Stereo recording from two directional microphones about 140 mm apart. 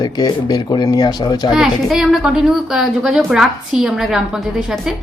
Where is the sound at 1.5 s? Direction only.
5° right (ahead or behind).